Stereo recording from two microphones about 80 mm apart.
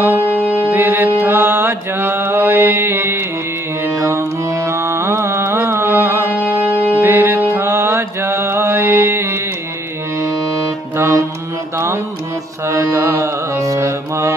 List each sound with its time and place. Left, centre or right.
0.0 s music: right
4.0 s carnatic music: right
11.0 s music: right
12.6 s carnatic music: right